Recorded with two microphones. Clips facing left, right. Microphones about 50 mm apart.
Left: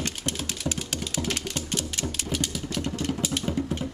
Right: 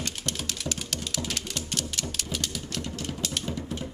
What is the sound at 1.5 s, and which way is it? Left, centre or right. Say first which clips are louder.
Typewriter: left 2 dB; left.